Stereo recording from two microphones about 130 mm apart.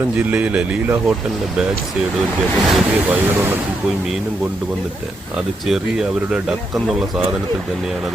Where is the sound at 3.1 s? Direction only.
15° right (ahead or behind).